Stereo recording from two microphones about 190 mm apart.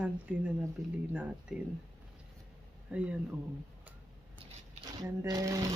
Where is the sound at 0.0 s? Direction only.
5° right (ahead or behind).